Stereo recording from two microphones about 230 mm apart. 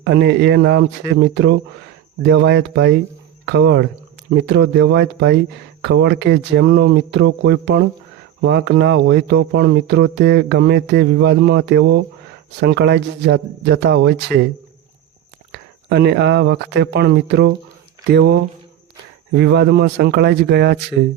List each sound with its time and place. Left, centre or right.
0.0 s speech: right
15.5 s speech: right